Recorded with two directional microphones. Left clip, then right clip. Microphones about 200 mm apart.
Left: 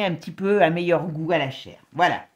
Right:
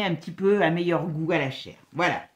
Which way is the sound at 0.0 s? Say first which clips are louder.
Even; 45° left (ahead or behind).